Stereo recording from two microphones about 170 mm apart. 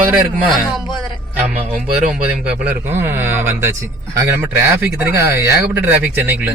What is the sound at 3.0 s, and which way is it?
Speech, 15° right (ahead or behind).